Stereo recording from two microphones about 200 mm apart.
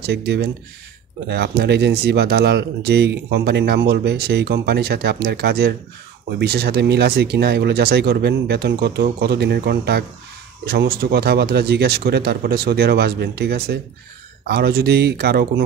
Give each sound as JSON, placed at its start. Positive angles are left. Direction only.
{"t": 0.0, "sound": "speech", "side_deg": -55}